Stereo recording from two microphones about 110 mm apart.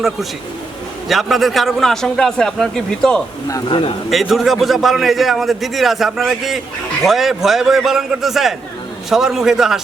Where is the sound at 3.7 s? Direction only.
50° left (ahead or behind).